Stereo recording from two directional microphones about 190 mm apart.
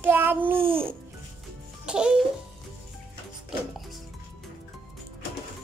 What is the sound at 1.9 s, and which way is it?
Speech, 5° right (ahead or behind).